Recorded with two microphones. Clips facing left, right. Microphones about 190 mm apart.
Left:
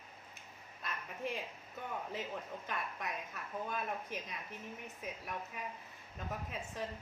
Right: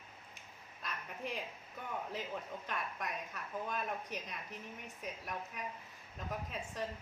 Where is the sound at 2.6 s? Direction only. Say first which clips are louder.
Even; centre (ahead or behind).